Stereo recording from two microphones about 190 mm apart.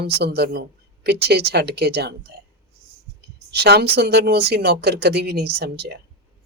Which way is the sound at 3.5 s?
60° right (ahead or behind).